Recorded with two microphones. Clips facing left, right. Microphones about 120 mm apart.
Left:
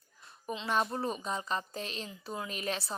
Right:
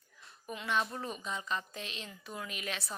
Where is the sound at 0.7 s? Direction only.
40° left (ahead or behind).